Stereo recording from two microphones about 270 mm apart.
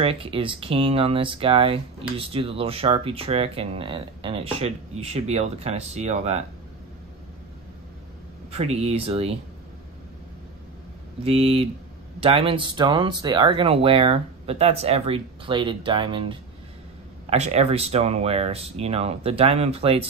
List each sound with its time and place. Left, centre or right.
0.0 s speech: right
8.5 s speech: right
11.2 s speech: right